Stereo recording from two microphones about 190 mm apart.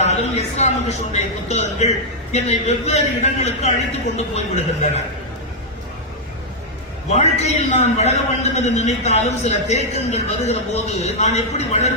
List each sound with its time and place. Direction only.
0.0 s a man's voice: 35° left (ahead or behind)
7.1 s a man's voice: 35° left (ahead or behind)